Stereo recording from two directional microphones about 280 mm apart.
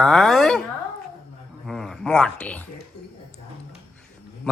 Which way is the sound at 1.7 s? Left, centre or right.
Centre.